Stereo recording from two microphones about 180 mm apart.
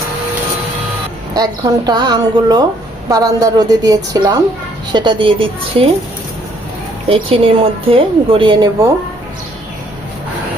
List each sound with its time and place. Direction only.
1.3 s a woman's voice: 20° right (ahead or behind)
7.1 s a woman's voice: 30° right (ahead or behind)